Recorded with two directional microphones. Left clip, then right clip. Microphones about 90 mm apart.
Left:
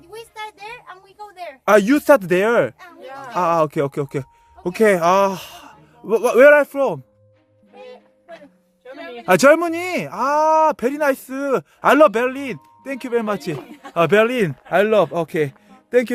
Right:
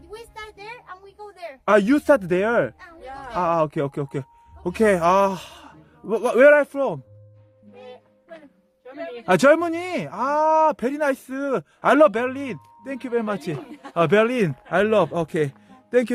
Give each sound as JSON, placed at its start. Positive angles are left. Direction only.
{"t": 0.1, "sound": "a sound", "side_deg": -10}
{"t": 1.6, "sound": "speech", "side_deg": 50}
{"t": 2.0, "sound": "speech", "side_deg": 70}
{"t": 2.7, "sound": "a sound", "side_deg": 0}
{"t": 3.3, "sound": "speech", "side_deg": 45}
{"t": 4.6, "sound": "speech", "side_deg": 30}
{"t": 9.2, "sound": "speech", "side_deg": 35}
{"t": 12.8, "sound": "speech", "side_deg": 55}
{"t": 13.7, "sound": "speech", "side_deg": 20}